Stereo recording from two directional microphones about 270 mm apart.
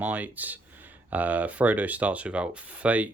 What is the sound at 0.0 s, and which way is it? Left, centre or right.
Speech, centre.